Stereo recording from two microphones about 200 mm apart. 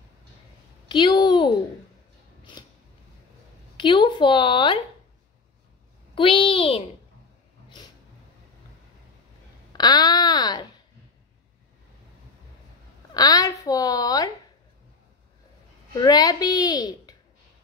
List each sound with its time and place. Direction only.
0.8 s a woman's voice: 20° left (ahead or behind)
3.7 s a woman's voice: 25° left (ahead or behind)
6.1 s a woman's voice: 25° left (ahead or behind)
9.7 s a sound: 20° left (ahead or behind)
13.1 s a woman's voice: 20° left (ahead or behind)
15.9 s a woman's voice: 20° left (ahead or behind)